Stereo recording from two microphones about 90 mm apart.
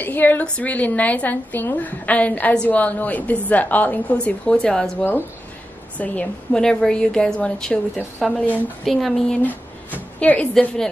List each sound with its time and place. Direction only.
0.0 s a woman's voice: 20° left (ahead or behind)
5.9 s a woman's voice: 10° left (ahead or behind)
9.4 s a sound: 20° left (ahead or behind)
10.2 s a woman's voice: 15° left (ahead or behind)